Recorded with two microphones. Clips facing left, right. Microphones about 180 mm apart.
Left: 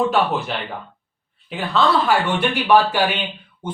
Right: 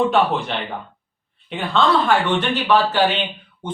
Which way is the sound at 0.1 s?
Centre (ahead or behind).